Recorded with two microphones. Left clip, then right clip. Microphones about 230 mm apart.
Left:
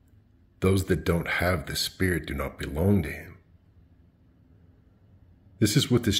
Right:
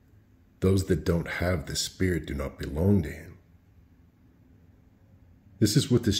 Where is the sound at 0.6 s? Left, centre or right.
Centre.